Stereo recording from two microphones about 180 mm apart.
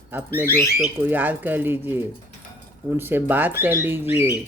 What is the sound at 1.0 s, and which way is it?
Speech, 10° right (ahead or behind).